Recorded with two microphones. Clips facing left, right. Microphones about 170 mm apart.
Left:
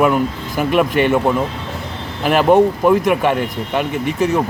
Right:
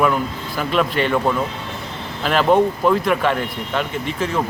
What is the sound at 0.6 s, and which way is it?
Speech, 15° left (ahead or behind).